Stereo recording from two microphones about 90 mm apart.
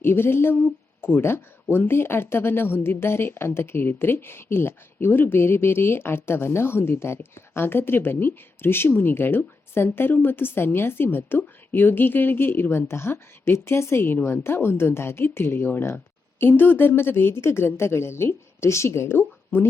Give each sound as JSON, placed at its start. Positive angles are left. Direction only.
{"t": 0.0, "sound": "a woman's voice", "side_deg": 25}